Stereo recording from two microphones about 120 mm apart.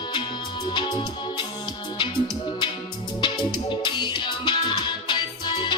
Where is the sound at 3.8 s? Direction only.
40° left (ahead or behind).